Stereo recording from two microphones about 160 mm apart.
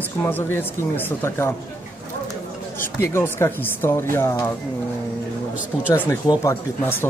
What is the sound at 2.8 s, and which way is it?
Speech, 15° left (ahead or behind).